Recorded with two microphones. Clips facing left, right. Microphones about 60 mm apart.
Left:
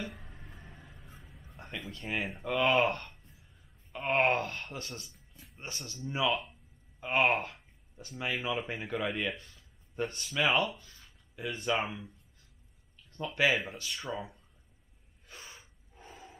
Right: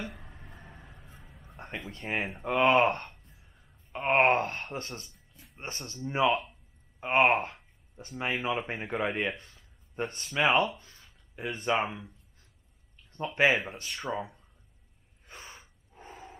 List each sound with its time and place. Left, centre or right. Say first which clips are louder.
0.1 s a sound: right 1 dB; centre
1.9 s speech: right 2 dB; right
13.1 s speech: right 3 dB; right
13.8 s speech: right 3 dB; centre
15.2 s gasp: right 3 dB; right
15.9 s a sound: right 4 dB; right